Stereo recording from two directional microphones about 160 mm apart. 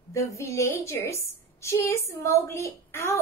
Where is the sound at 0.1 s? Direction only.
20° left (ahead or behind).